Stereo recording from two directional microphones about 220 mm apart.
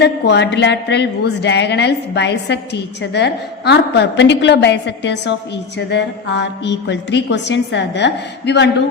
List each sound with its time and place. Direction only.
0.0 s a woman's voice: 50° left (ahead or behind)